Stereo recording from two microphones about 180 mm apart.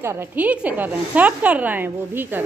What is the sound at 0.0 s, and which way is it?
A woman's voice, 15° right (ahead or behind).